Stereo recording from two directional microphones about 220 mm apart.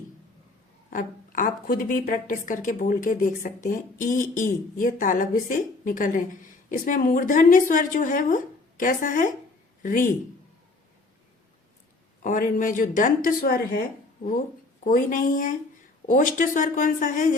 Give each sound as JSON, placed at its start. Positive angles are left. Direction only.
{"t": 0.9, "sound": "a woman's voice", "side_deg": 35}
{"t": 12.2, "sound": "a woman's voice", "side_deg": 35}
{"t": 14.8, "sound": "a woman's voice", "side_deg": 40}